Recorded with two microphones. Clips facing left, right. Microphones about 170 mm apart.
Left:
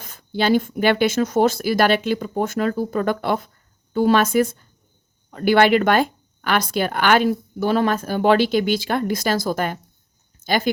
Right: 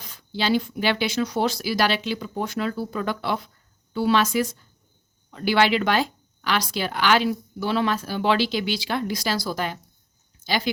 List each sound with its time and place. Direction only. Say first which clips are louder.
0.0 s speech: left 5 dB; 50° left (ahead or behind)